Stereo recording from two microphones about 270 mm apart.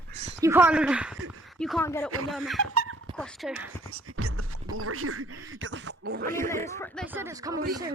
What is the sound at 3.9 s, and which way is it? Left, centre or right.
Whispering, right.